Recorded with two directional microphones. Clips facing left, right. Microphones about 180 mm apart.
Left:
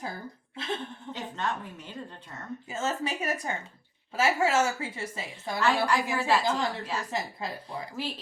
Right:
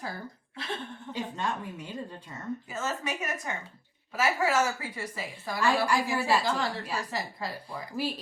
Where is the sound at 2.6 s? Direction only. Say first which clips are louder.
Left 6 dB; 30° left (ahead or behind).